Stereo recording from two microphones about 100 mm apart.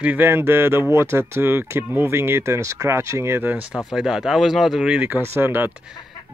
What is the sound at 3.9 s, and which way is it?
Speech, 5° right (ahead or behind).